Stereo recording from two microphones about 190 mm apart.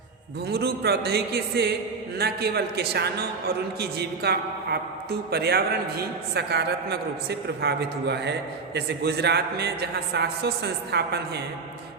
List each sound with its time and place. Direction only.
0.4 s a man's voice: 60° right (ahead or behind)